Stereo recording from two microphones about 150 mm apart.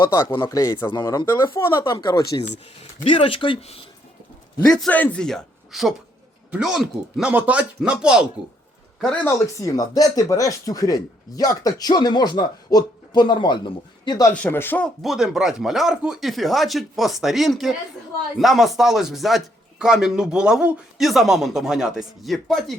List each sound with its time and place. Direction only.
0.3 s speech: 25° left (ahead or behind)
0.9 s speech: 30° left (ahead or behind)
1.9 s speech: 30° left (ahead or behind)
4.6 s speech: 5° left (ahead or behind)
9.2 s speech: 20° left (ahead or behind)
14.4 s speech: 15° left (ahead or behind)
15.0 s speech: centre (ahead or behind)